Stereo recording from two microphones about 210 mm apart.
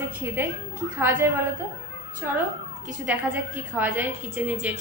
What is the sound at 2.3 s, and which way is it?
A woman's voice, 10° right (ahead or behind).